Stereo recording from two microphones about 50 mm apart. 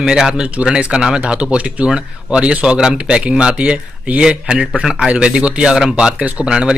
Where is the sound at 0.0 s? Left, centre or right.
Centre.